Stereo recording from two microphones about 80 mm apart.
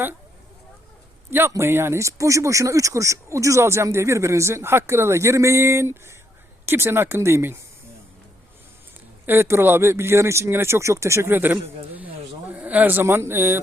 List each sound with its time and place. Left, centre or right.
1.3 s speech: right
9.2 s a man's voice: right